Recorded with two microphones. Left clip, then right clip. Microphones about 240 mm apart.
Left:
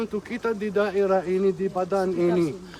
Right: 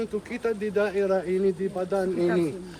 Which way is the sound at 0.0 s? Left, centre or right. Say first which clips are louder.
Left 1 dB; left.